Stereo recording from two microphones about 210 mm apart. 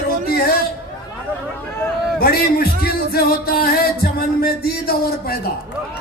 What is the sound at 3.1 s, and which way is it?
Music, 45° left (ahead or behind).